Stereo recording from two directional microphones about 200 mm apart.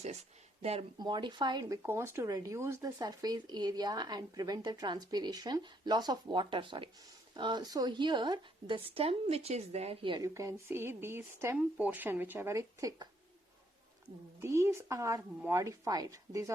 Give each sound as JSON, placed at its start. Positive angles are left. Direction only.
{"t": 0.6, "sound": "speech", "side_deg": -30}
{"t": 14.3, "sound": "a woman's voice", "side_deg": -15}